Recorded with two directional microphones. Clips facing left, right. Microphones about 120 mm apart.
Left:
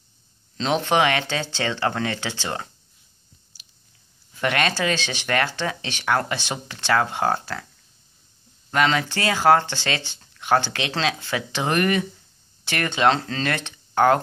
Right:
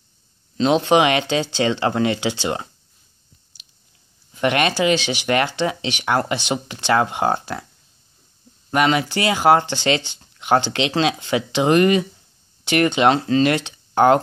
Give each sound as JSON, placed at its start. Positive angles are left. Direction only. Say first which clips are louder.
{"t": 0.6, "sound": "speech", "louder": "right 5 dB", "side_deg": -15}
{"t": 4.3, "sound": "speech", "louder": "right 4 dB", "side_deg": -20}
{"t": 8.6, "sound": "speech", "louder": "right 3 dB", "side_deg": -15}